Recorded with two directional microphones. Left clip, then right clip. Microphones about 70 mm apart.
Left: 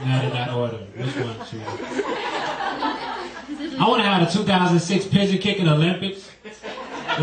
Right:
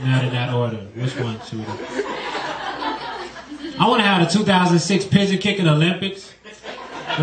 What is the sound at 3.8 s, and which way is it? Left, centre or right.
A man's voice, right.